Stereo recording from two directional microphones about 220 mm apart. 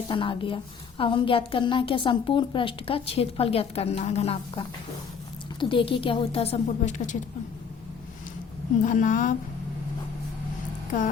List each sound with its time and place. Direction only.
0.1 s a woman's voice: 25° left (ahead or behind)
8.8 s a woman's voice: 35° left (ahead or behind)